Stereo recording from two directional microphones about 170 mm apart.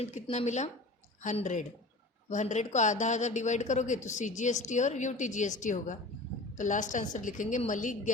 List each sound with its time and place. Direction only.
0.0 s speech: 40° left (ahead or behind)